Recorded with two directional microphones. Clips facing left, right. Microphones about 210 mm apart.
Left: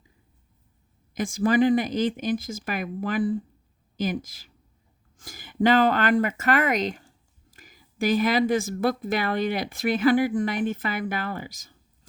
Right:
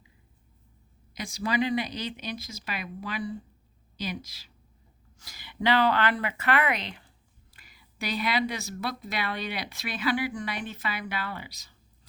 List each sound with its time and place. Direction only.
1.1 s a woman's voice: 50° left (ahead or behind)